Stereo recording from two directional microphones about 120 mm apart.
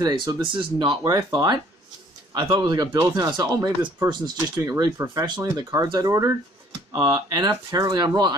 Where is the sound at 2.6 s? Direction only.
35° right (ahead or behind).